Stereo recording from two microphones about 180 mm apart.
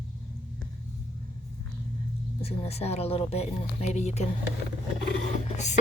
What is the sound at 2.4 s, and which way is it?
Speech, 35° left (ahead or behind).